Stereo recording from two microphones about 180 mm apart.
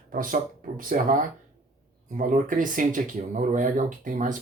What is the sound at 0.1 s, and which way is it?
Speech, 50° right (ahead or behind).